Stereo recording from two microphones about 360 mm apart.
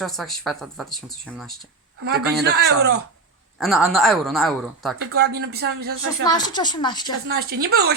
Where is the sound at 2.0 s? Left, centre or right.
Right.